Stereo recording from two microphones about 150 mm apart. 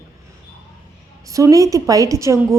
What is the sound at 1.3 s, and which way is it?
A woman's voice, 20° right (ahead or behind).